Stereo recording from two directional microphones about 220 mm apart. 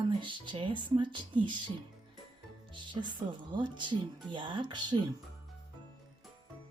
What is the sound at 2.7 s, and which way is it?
Music, 20° right (ahead or behind).